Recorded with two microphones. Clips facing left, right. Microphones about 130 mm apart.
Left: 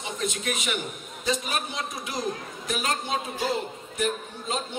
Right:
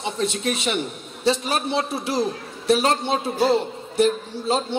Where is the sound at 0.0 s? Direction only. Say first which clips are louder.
Right 6 dB; 30° right (ahead or behind).